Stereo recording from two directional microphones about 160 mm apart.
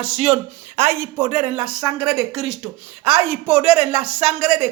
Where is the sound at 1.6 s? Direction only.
20° right (ahead or behind).